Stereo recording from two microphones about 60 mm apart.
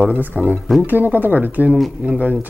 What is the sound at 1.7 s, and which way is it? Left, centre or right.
Speech, centre.